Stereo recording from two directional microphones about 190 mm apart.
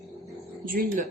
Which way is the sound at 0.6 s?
50° right (ahead or behind).